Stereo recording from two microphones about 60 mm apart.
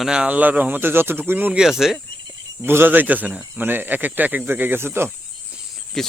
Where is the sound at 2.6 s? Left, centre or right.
Right.